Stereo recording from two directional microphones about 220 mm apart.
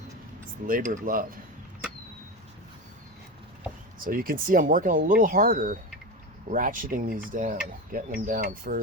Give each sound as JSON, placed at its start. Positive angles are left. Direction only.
{"t": 0.7, "sound": "speech", "side_deg": -35}
{"t": 4.0, "sound": "speech", "side_deg": -40}